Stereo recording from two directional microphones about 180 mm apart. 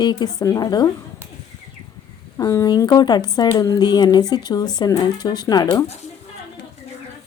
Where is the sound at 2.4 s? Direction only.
20° left (ahead or behind).